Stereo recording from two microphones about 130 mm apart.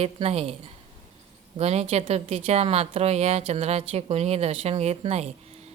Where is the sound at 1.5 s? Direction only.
55° right (ahead or behind).